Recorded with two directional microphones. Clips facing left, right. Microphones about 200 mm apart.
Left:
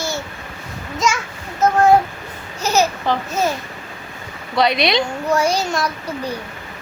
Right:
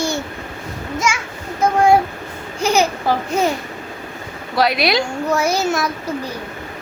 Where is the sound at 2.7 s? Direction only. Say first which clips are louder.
Even; 15° right (ahead or behind).